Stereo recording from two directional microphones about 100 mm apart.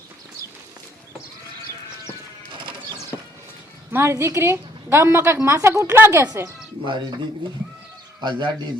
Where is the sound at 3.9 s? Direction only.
25° right (ahead or behind).